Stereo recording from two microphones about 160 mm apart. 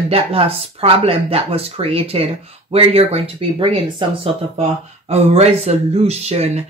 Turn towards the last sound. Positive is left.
turn(degrees=-40)  # may be behind; listen again after turning